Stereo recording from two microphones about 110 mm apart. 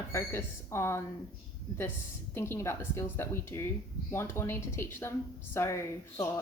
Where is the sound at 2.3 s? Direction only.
25° left (ahead or behind).